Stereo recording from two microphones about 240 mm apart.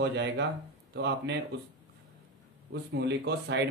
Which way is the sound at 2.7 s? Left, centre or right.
Right.